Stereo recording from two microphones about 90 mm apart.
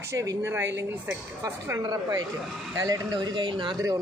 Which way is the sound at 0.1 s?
35° right (ahead or behind).